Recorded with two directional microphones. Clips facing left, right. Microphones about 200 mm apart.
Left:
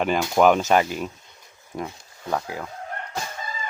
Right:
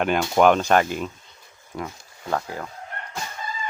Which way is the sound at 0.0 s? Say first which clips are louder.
Even; centre (ahead or behind).